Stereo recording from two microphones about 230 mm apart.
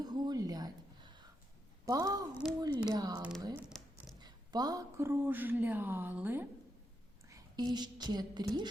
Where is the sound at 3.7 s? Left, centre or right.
Centre.